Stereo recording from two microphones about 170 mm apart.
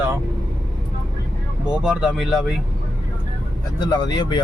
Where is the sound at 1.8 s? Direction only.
5° right (ahead or behind).